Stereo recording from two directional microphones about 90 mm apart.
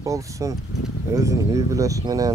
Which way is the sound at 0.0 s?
35° right (ahead or behind).